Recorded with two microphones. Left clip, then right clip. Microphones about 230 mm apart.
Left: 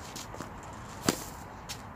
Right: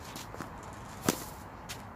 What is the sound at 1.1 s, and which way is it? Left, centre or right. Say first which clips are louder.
Whip: left 1 dB; centre.